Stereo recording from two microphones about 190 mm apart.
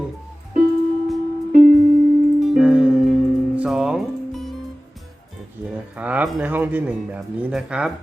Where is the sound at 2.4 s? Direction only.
5° right (ahead or behind).